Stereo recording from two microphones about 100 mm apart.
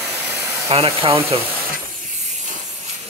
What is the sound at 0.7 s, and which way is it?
Speech, 75° right (ahead or behind).